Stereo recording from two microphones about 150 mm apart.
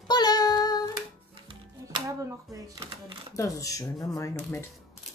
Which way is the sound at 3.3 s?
20° left (ahead or behind).